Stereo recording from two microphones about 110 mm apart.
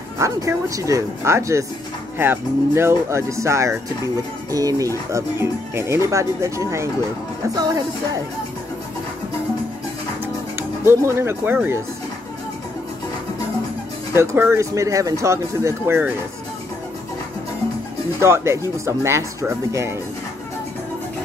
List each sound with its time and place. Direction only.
0.2 s speech: 30° right (ahead or behind)
7.5 s music: 35° right (ahead or behind)
10.8 s speech: 25° right (ahead or behind)
14.1 s speech: 20° right (ahead or behind)
18.2 s speech: 25° right (ahead or behind)